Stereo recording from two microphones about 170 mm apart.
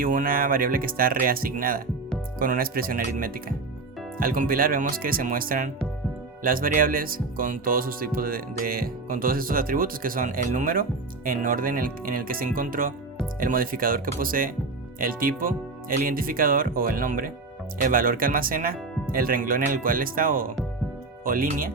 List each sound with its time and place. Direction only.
0.0 s speech: 55° right (ahead or behind)